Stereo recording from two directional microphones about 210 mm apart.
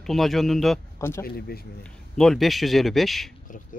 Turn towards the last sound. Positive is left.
turn(degrees=0)  # may be behind; listen again after turning